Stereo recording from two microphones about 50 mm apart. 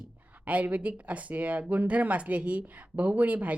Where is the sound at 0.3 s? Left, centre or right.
Right.